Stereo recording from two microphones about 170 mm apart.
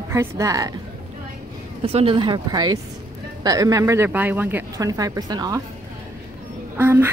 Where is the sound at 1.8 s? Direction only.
35° right (ahead or behind).